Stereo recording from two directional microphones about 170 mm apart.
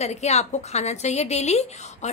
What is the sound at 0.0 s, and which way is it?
A woman's voice, 40° left (ahead or behind).